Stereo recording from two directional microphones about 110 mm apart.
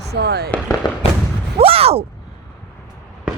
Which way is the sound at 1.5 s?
60° right (ahead or behind).